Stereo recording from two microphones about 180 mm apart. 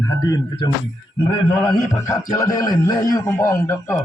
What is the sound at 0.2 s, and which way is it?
A man's voice, 25° left (ahead or behind).